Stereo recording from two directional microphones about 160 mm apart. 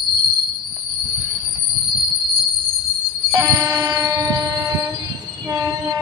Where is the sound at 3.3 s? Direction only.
20° right (ahead or behind).